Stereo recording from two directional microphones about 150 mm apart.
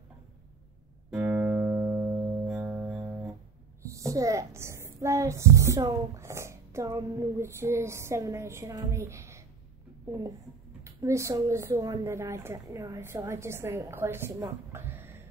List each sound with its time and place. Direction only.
1.1 s music: 10° right (ahead or behind)
2.4 s music: centre (ahead or behind)
2.7 s music: 10° right (ahead or behind)
3.9 s a woman's voice: 20° right (ahead or behind)
10.8 s speech: 20° right (ahead or behind)